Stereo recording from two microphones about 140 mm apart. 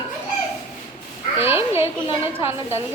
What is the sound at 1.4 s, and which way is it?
Speech, 15° right (ahead or behind).